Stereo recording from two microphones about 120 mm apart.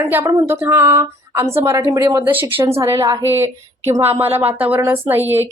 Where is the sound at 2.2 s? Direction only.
15° right (ahead or behind).